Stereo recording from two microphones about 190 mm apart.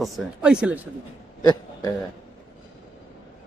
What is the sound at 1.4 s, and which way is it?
Speech, 20° left (ahead or behind).